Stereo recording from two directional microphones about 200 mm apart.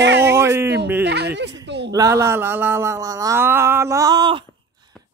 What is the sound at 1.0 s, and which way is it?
Speech, 55° right (ahead or behind).